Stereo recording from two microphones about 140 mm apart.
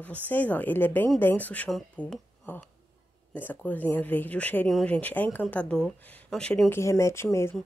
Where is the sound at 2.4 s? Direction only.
15° left (ahead or behind).